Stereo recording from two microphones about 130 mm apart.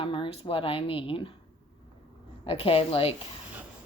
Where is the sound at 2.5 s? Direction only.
45° left (ahead or behind).